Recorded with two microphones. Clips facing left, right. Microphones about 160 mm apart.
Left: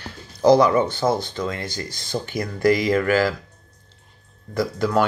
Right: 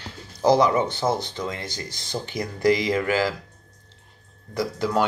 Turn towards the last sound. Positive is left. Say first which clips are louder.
# left 3 dB
turn(degrees=-20)  # may be behind; listen again after turning